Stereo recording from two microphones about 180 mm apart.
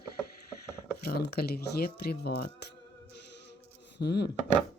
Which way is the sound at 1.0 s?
60° left (ahead or behind).